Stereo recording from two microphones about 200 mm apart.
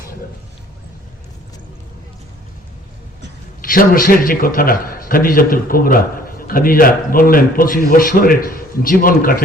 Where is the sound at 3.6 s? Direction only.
45° left (ahead or behind).